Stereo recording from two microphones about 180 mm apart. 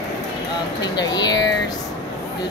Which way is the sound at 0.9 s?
25° left (ahead or behind).